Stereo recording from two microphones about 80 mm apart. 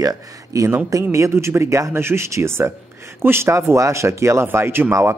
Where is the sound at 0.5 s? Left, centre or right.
Right.